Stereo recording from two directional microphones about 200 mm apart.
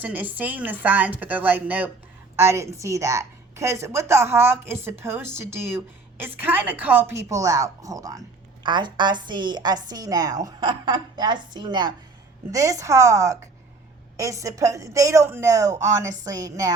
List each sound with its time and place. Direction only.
0.0 s a woman's voice: 10° right (ahead or behind)